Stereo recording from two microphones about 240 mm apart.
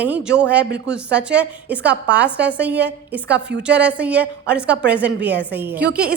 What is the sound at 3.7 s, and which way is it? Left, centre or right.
A woman's voice, centre.